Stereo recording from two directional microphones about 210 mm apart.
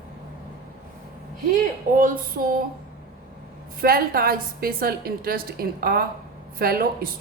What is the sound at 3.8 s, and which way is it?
A woman's voice, 45° right (ahead or behind).